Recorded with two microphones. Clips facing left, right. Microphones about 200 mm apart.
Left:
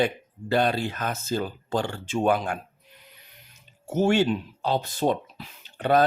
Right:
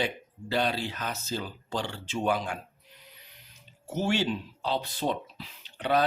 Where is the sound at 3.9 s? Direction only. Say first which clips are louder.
Left 7 dB; 50° left (ahead or behind).